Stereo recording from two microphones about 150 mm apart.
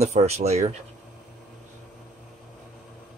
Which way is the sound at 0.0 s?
45° right (ahead or behind).